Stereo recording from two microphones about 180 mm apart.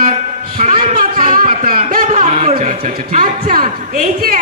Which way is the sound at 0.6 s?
45° right (ahead or behind).